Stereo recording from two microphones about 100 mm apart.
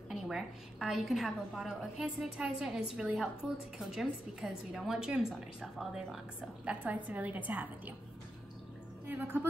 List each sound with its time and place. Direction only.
0.1 s a woman's voice: 5° right (ahead or behind)